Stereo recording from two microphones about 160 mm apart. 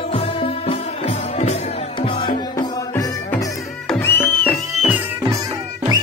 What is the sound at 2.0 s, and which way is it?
Music, 30° left (ahead or behind).